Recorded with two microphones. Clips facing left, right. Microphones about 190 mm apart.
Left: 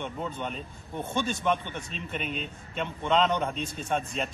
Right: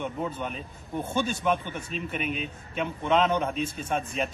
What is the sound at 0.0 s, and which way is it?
A man's voice, 5° right (ahead or behind).